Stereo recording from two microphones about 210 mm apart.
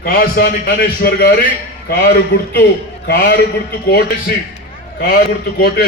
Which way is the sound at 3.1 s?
55° left (ahead or behind).